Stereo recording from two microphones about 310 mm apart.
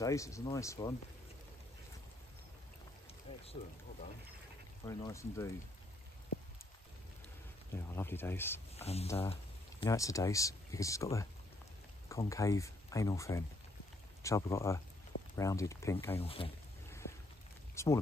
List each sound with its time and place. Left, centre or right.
0.0 s speech: centre
3.3 s a sound: centre
4.8 s speech: centre
7.7 s speech: centre
16.2 s a sound: centre
17.8 s speech: centre